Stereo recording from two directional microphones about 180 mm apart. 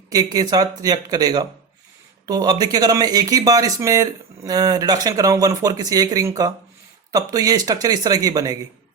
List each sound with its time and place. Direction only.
0.1 s speech: 20° right (ahead or behind)